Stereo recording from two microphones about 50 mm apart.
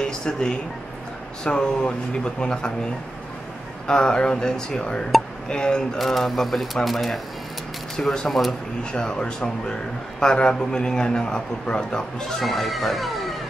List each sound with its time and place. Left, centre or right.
0.0 s a sound: centre
1.4 s a man's voice: centre
3.8 s a man's voice: centre
5.9 s speech: centre
8.9 s a man's voice: centre
12.4 s speech: centre